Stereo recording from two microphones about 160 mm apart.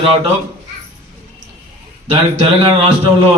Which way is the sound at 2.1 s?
35° right (ahead or behind).